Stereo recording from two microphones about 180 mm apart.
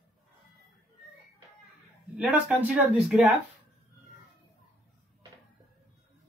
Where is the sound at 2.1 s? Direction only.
10° right (ahead or behind).